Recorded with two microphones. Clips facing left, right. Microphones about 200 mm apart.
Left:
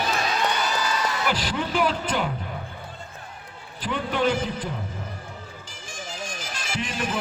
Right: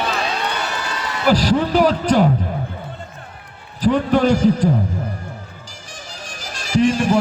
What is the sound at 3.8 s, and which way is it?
Speech, 40° right (ahead or behind).